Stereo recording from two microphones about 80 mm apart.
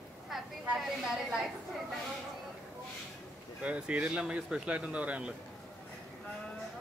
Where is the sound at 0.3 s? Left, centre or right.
Centre.